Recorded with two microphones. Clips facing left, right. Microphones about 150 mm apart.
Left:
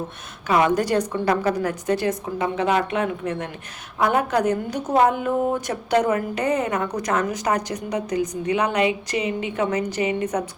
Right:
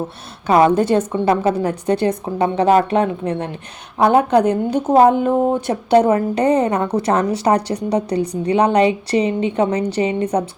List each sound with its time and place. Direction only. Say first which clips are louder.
0.4 s a woman's voice: right 6 dB; 30° right (ahead or behind)